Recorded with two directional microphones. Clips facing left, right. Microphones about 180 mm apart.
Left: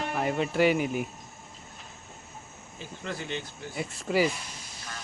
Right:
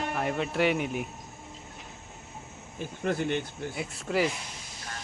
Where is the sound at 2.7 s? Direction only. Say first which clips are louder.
Right 7 dB; 55° right (ahead or behind).